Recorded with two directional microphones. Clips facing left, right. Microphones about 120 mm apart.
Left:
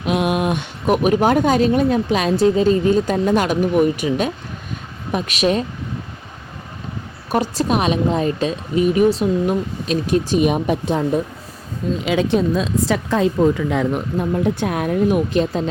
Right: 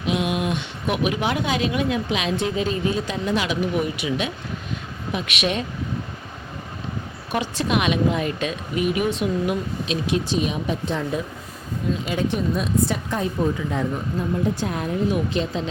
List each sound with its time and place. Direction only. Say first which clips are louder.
0.0 s speech: left 5 dB; 55° left (ahead or behind); by 5.6 s 40° left (ahead or behind)
7.3 s speech: left 5 dB; 40° left (ahead or behind)
12.0 s a woman's voice: left 9 dB; 90° left; by 15.7 s 50° left (ahead or behind)